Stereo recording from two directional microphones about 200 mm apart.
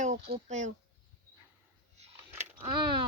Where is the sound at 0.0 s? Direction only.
35° right (ahead or behind).